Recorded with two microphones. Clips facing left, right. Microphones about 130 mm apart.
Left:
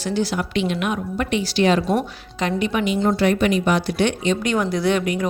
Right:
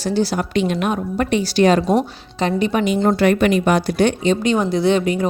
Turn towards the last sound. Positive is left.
turn(degrees=-30)  # may be behind; listen again after turning